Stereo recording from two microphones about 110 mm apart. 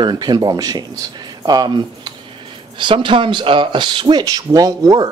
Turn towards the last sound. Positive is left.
turn(degrees=-35)  # may be behind; listen again after turning